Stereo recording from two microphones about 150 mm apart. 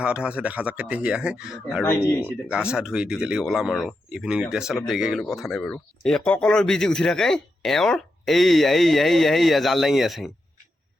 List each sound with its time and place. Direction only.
0.0 s speech: 5° right (ahead or behind)
1.8 s speech: 15° left (ahead or behind)
2.5 s speech: 5° right (ahead or behind)